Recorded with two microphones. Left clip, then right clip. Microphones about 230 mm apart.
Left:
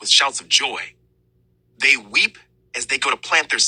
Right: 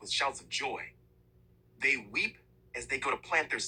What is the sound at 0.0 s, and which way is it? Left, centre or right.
Speech, left.